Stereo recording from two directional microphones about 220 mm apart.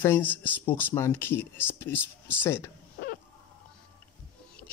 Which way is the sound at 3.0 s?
50° left (ahead or behind).